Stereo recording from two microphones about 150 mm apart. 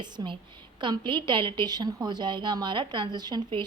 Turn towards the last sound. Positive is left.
turn(degrees=-30)  # may be behind; listen again after turning